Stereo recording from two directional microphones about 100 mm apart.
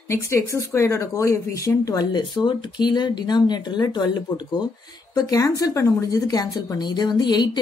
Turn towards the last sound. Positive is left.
turn(degrees=45)  # may be behind; listen again after turning